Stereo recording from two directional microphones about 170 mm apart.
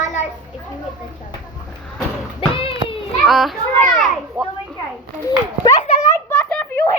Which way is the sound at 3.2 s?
Centre (ahead or behind).